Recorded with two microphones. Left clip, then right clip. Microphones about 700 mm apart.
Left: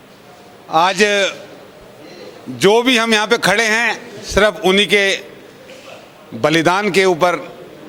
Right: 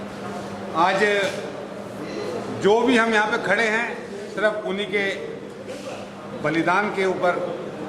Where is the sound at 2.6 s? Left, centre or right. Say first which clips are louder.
Left 6 dB; left.